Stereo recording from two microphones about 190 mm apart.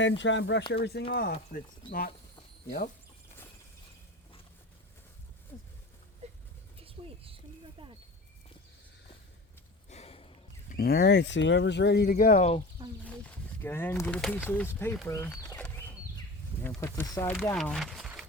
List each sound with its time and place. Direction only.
0.0 s speech: 75° left (ahead or behind)
0.7 s speech: 60° left (ahead or behind)
6.2 s a sound: 35° right (ahead or behind)
9.9 s a sound: 30° left (ahead or behind)
10.8 s speech: 55° left (ahead or behind); by 12.6 s 35° left (ahead or behind)
13.6 s speech: 10° left (ahead or behind)
14.2 s speech: centre (ahead or behind)
15.0 s a sound: 15° left (ahead or behind)
16.6 s speech: 10° left (ahead or behind)